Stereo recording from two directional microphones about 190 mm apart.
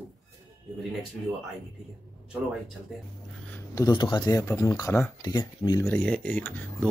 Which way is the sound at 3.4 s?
10° left (ahead or behind).